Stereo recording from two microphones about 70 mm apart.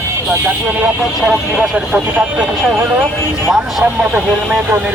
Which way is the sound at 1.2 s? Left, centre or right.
Centre.